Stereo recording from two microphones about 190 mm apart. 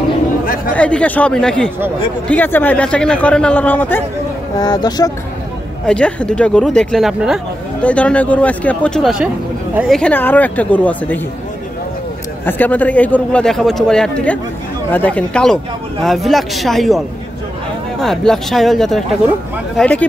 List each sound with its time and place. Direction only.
0.7 s a man's voice: 5° left (ahead or behind)
4.6 s speech: 20° left (ahead or behind)
5.9 s a man's voice: 5° left (ahead or behind)
12.4 s a man's voice: 10° left (ahead or behind)
18.0 s a man's voice: centre (ahead or behind)